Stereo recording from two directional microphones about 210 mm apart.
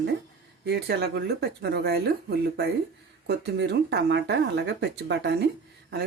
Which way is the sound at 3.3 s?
50° right (ahead or behind).